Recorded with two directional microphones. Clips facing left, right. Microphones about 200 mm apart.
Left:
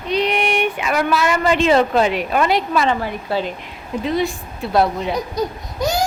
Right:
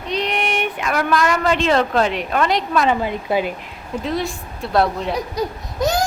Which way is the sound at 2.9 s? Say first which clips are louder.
Right 2 dB; 20° right (ahead or behind).